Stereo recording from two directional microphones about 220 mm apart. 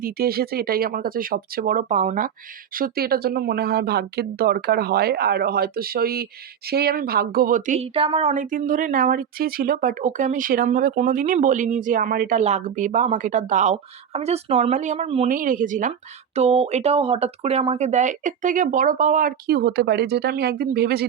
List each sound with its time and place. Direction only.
0.0 s speech: 45° right (ahead or behind)